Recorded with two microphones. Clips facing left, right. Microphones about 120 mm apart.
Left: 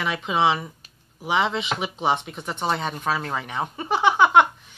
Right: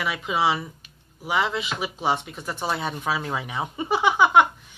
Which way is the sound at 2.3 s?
20° left (ahead or behind).